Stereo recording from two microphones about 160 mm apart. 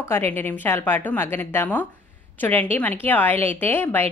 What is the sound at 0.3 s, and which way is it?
A woman's voice, 10° left (ahead or behind).